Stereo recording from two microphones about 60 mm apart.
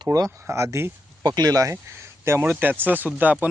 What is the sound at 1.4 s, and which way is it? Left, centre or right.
Speech, right.